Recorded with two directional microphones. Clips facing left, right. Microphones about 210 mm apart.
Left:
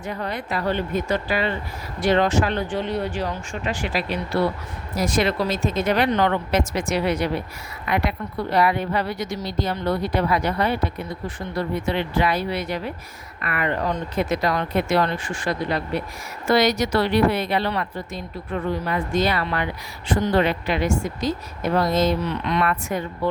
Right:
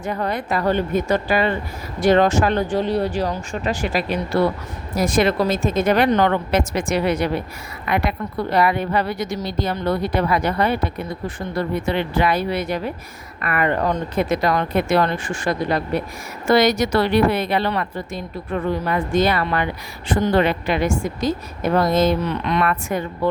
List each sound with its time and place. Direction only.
0.0 s a woman's voice: 50° right (ahead or behind)
11.9 s a woman's voice: 55° right (ahead or behind)